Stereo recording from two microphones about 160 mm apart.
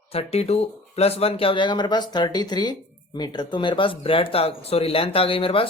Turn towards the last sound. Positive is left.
turn(degrees=35)  # may be behind; listen again after turning